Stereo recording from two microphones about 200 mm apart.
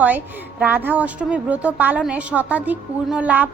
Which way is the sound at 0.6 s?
10° right (ahead or behind).